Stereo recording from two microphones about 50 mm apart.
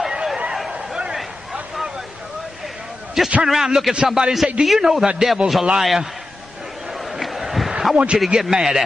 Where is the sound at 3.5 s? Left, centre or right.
Centre.